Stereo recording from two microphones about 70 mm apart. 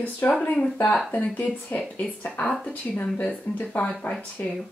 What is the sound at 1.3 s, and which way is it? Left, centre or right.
Speech, left.